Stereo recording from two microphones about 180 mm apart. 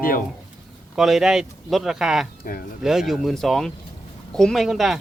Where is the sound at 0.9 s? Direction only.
Centre (ahead or behind).